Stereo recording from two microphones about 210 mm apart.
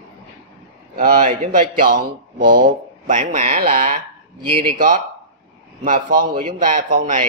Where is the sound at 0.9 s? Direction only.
45° right (ahead or behind).